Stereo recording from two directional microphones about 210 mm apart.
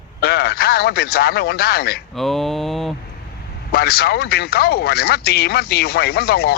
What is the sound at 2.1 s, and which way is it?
Mantra, centre (ahead or behind).